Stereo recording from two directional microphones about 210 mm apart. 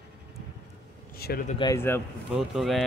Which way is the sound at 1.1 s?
45° left (ahead or behind).